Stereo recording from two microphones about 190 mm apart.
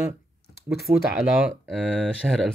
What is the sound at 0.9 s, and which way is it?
Speech, 35° right (ahead or behind).